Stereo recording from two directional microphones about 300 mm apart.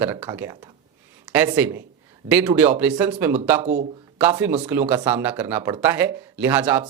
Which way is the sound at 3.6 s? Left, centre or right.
Right.